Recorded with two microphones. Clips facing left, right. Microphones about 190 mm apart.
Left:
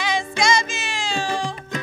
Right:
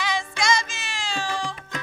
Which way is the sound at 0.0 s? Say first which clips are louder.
Left 4 dB; 20° left (ahead or behind).